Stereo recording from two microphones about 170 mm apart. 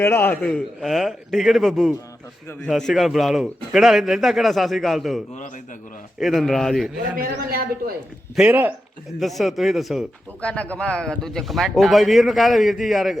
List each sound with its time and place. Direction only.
0.0 s speech: 15° left (ahead or behind)
7.2 s speech: 60° right (ahead or behind)
8.4 s speech: 10° right (ahead or behind)